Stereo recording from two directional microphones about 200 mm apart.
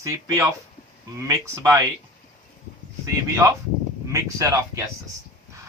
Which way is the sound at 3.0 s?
15° right (ahead or behind).